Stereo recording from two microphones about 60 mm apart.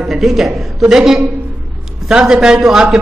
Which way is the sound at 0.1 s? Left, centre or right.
Centre.